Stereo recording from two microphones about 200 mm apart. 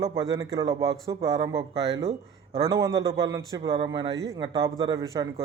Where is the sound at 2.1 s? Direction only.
30° right (ahead or behind).